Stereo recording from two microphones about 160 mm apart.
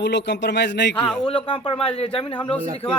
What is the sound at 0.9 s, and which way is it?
Speech, 5° left (ahead or behind).